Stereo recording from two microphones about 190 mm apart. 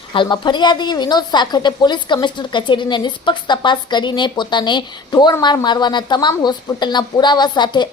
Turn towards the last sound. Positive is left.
turn(degrees=20)  # may be behind; listen again after turning